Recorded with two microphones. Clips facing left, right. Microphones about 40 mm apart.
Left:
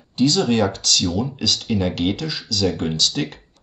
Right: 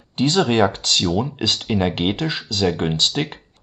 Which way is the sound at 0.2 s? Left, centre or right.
Right.